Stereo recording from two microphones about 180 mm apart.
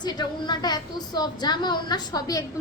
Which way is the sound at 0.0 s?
25° left (ahead or behind).